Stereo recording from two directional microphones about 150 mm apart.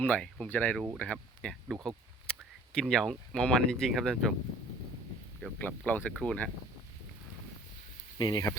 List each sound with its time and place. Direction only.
0.0 s speech: 5° left (ahead or behind)
5.5 s speech: 10° left (ahead or behind)
8.2 s speech: 30° left (ahead or behind)